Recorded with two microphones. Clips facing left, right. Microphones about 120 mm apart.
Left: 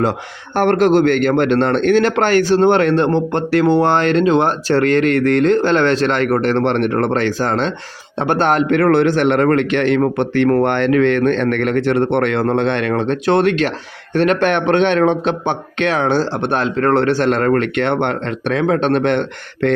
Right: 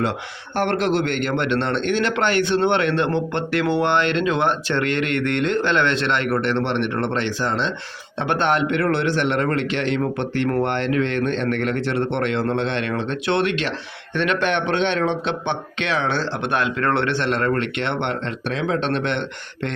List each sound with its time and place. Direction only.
0.5 s a man's voice: 45° left (ahead or behind)